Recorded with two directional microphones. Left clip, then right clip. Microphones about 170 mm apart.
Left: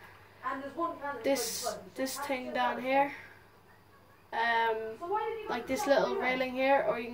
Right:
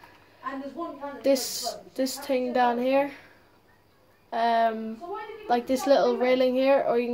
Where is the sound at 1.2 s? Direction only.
50° right (ahead or behind).